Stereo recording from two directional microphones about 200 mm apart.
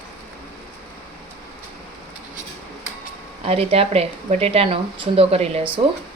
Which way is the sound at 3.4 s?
30° right (ahead or behind).